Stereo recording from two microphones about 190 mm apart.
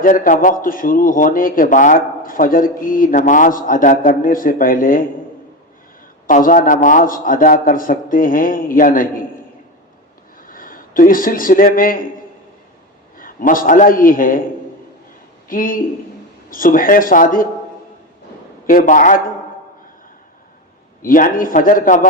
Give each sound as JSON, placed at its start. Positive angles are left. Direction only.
{"t": 0.0, "sound": "a man's voice", "side_deg": 45}
{"t": 6.2, "sound": "a man's voice", "side_deg": 45}
{"t": 10.4, "sound": "a man's voice", "side_deg": 45}
{"t": 13.1, "sound": "a man's voice", "side_deg": 45}
{"t": 15.4, "sound": "a man's voice", "side_deg": 45}
{"t": 18.6, "sound": "a man's voice", "side_deg": 45}
{"t": 21.0, "sound": "a man's voice", "side_deg": 45}